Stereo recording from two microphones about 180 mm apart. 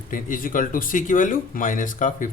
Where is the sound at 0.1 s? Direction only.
50° left (ahead or behind).